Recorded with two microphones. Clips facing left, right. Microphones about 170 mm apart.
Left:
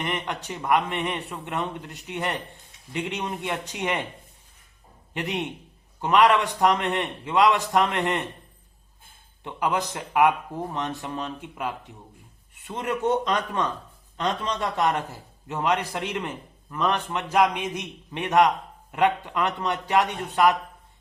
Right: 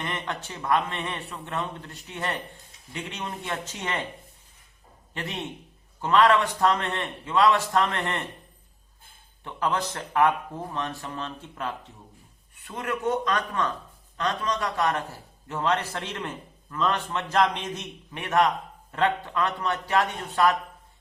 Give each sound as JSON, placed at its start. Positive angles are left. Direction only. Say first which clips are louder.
{"t": 0.0, "sound": "a man's voice", "louder": "left 3 dB", "side_deg": 15}
{"t": 5.1, "sound": "a man's voice", "louder": "left 5 dB", "side_deg": 20}
{"t": 9.4, "sound": "a man's voice", "louder": "left 1 dB", "side_deg": 15}